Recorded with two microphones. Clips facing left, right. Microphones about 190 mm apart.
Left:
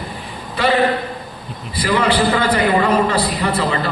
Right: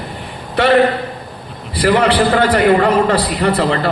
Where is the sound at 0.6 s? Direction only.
70° right (ahead or behind).